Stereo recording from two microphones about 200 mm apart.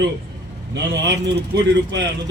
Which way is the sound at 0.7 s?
65° right (ahead or behind).